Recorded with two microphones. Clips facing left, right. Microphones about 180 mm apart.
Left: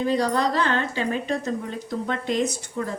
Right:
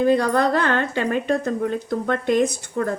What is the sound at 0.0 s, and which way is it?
Speech, 55° right (ahead or behind).